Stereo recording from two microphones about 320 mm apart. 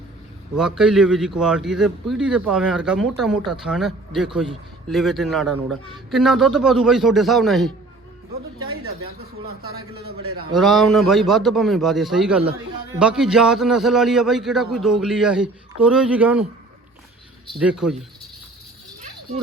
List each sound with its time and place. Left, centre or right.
0.5 s a man's voice: centre
8.5 s a sound: right
9.7 s a man's voice: right
10.5 s a man's voice: centre
17.6 s a man's voice: centre